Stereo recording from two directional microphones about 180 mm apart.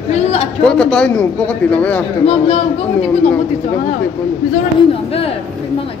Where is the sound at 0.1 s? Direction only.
35° left (ahead or behind).